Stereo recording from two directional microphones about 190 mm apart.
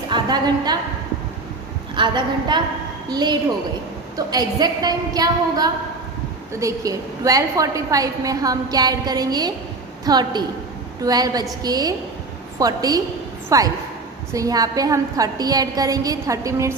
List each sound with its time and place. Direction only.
0.1 s a woman's voice: 20° right (ahead or behind)
2.0 s a woman's voice: 25° right (ahead or behind)